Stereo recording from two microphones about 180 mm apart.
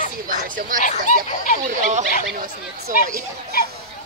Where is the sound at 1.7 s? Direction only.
40° right (ahead or behind).